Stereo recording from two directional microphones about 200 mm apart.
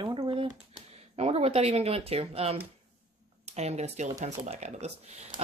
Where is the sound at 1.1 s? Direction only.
30° right (ahead or behind).